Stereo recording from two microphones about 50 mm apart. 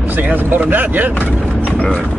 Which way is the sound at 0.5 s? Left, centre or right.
Right.